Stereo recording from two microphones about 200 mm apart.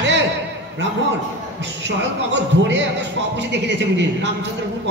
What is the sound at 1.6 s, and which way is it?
Speech, 60° right (ahead or behind).